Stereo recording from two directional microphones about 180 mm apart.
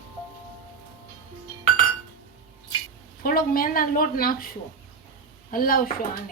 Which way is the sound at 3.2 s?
55° left (ahead or behind).